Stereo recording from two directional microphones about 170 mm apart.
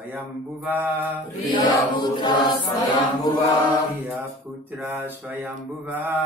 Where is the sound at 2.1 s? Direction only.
25° left (ahead or behind).